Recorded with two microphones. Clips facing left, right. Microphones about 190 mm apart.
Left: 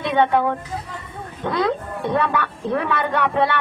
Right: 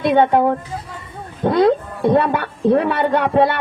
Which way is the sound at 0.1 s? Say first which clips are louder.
Right 3 dB; 35° right (ahead or behind).